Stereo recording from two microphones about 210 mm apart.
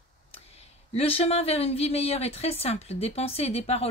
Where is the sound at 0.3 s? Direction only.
30° left (ahead or behind).